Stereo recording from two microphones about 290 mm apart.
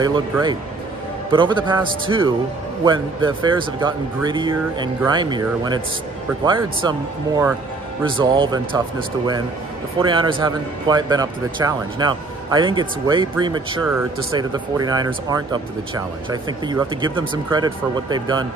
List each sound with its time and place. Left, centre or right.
0.0 s speech: centre
9.9 s speech: centre